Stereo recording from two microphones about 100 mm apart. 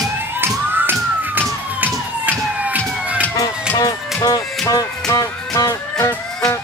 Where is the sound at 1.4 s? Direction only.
20° right (ahead or behind).